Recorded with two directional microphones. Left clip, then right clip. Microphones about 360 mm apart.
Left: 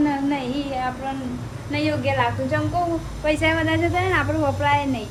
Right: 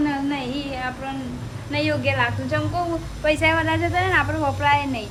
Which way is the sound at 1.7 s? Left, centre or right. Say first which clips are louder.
Even; centre.